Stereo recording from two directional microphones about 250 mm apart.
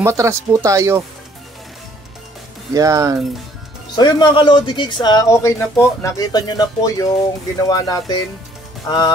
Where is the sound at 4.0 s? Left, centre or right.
Centre.